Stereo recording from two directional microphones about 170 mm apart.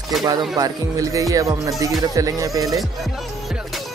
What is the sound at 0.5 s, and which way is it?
Music, 20° right (ahead or behind).